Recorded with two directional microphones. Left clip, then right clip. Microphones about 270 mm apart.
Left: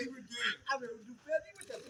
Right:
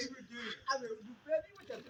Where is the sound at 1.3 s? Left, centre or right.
Centre.